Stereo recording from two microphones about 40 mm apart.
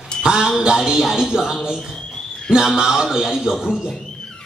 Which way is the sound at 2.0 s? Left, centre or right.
Centre.